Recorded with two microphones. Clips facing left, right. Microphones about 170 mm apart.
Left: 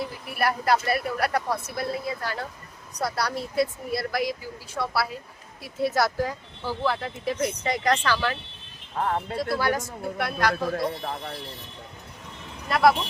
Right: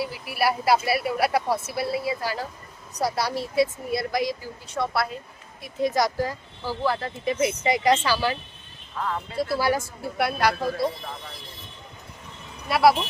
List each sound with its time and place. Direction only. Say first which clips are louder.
0.0 s a woman's voice: right 2 dB; 5° right (ahead or behind)
5.6 s a woman's voice: right 1 dB; 5° left (ahead or behind)
6.0 s speech: right 1 dB; 10° right (ahead or behind)
9.0 s speech: left 3 dB; 50° left (ahead or behind)
9.6 s speech: right 2 dB; 10° right (ahead or behind)
10.8 s speech: right 1 dB; 55° left (ahead or behind)
12.6 s speech: right 1 dB; 10° right (ahead or behind)